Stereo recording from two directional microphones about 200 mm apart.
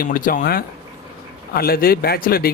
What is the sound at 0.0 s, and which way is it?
Speech, 45° left (ahead or behind).